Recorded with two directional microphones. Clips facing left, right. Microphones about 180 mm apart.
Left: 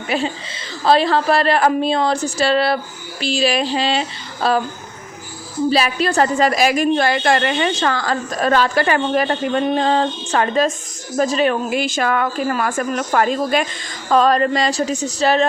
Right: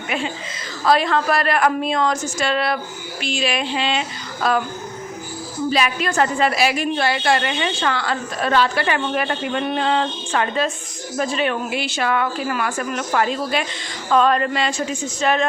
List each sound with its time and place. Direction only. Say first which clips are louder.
0.1 s speech: left 4 dB; 35° left (ahead or behind)
5.7 s a woman's voice: left 2 dB; 35° left (ahead or behind)